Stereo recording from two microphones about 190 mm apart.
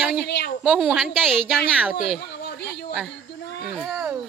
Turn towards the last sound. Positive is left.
turn(degrees=-5)  # may be behind; listen again after turning